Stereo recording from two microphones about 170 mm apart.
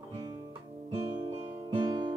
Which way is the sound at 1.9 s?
30° right (ahead or behind).